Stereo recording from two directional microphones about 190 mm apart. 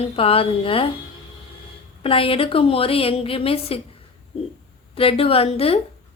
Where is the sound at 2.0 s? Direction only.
30° left (ahead or behind).